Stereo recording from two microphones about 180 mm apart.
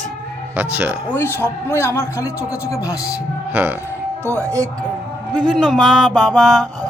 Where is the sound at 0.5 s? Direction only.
10° right (ahead or behind).